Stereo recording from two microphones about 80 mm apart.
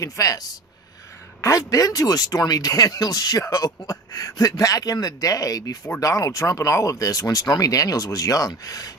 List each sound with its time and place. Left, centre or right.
0.0 s speech: left